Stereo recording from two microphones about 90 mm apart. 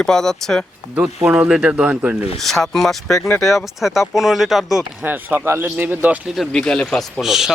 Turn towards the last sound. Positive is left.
turn(degrees=-5)  # may be behind; listen again after turning